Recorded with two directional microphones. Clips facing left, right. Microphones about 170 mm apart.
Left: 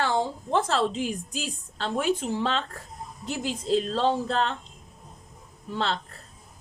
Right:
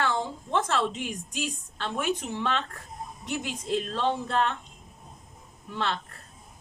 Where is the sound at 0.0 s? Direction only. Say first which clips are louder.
Left 3 dB; 35° left (ahead or behind).